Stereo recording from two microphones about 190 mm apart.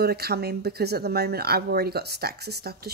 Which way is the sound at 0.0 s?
55° right (ahead or behind).